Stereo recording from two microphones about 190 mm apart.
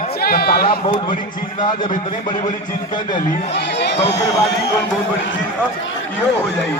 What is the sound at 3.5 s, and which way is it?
Speech, 60° left (ahead or behind).